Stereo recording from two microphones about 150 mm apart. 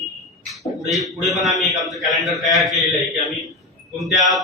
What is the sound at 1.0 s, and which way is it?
A man's voice, centre (ahead or behind).